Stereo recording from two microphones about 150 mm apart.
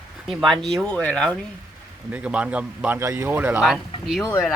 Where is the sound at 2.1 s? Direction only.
10° right (ahead or behind).